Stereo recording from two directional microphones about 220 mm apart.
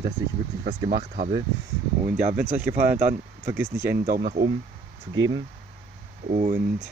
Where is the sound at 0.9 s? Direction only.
40° right (ahead or behind).